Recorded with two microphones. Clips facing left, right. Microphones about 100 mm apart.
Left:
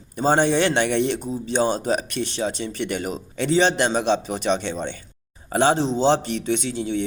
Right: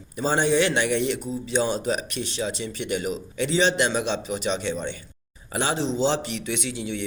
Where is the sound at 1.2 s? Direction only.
45° left (ahead or behind).